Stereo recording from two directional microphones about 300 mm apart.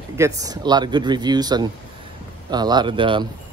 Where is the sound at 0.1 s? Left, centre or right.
Centre.